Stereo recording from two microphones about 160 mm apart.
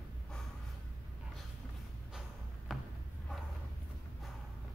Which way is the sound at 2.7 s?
Centre (ahead or behind).